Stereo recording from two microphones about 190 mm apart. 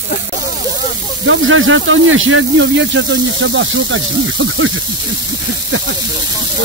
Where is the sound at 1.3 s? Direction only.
90° right.